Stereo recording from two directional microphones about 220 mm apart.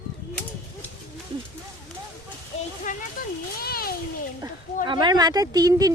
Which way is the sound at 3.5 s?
45° left (ahead or behind).